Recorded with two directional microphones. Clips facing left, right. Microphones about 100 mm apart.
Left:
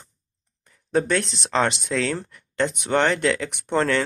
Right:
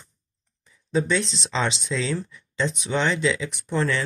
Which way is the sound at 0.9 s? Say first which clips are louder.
Left 1 dB; 60° left (ahead or behind).